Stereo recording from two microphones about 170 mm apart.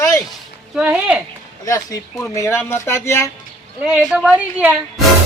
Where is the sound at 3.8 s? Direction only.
Centre (ahead or behind).